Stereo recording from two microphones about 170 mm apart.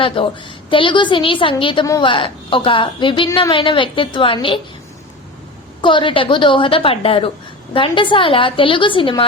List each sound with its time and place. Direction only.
0.0 s a woman's voice: 30° left (ahead or behind)
3.2 s a woman's voice: 20° left (ahead or behind)
3.5 s a woman's voice: 30° left (ahead or behind)
5.8 s a woman's voice: 30° left (ahead or behind)